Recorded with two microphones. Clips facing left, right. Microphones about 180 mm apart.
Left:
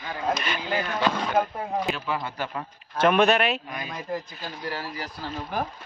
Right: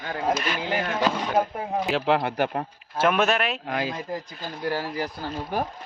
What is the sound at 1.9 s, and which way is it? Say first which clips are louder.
Speech: right 7 dB; 75° right (ahead or behind).